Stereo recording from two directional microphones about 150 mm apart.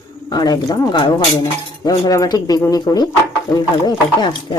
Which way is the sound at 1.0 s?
35° left (ahead or behind).